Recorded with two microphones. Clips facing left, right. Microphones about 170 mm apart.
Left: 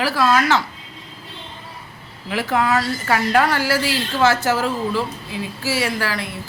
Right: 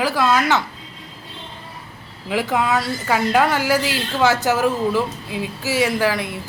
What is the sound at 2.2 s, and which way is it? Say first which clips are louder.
A woman's voice: even; 15° right (ahead or behind).